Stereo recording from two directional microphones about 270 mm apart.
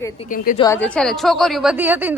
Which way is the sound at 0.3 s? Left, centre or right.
Left.